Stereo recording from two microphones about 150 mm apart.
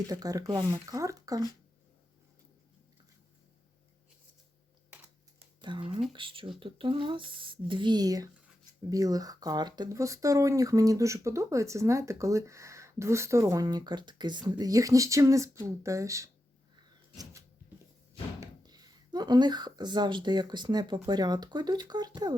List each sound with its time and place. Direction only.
0.1 s speech: 25° right (ahead or behind)
5.6 s speech: 35° right (ahead or behind)
18.3 s speech: 25° right (ahead or behind)